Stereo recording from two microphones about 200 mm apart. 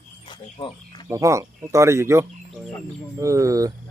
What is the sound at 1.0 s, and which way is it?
Speech, 15° right (ahead or behind).